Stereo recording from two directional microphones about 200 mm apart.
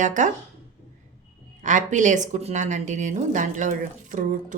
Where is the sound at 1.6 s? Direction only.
40° right (ahead or behind).